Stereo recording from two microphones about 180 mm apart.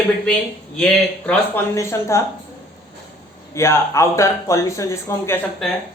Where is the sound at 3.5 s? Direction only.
15° left (ahead or behind).